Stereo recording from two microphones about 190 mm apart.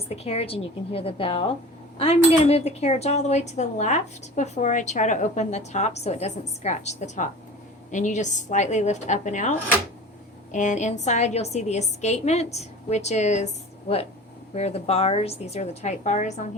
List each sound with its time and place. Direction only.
0.3 s speech: 30° left (ahead or behind)